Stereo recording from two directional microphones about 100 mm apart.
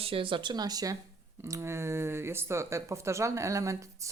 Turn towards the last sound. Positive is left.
turn(degrees=-30)  # may be behind; listen again after turning